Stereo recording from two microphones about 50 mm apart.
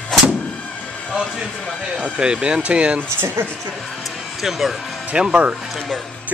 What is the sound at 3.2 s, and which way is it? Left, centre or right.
Speech, right.